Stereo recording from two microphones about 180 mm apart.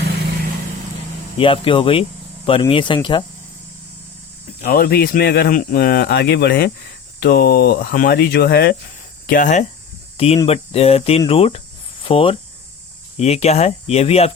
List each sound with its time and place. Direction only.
1.4 s speech: 30° left (ahead or behind)
4.6 s speech: 55° left (ahead or behind)
9.2 s speech: 50° left (ahead or behind)
10.2 s speech: 35° left (ahead or behind)